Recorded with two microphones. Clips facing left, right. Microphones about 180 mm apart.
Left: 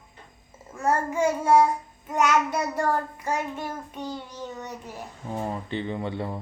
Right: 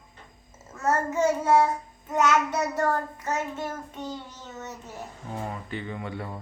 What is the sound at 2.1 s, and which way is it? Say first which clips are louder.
A child's voice: even; 10° left (ahead or behind).